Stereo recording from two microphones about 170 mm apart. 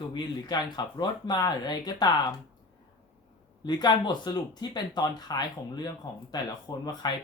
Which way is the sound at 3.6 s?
25° left (ahead or behind).